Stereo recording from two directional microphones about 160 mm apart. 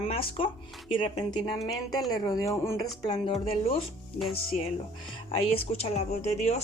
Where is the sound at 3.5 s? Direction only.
35° left (ahead or behind).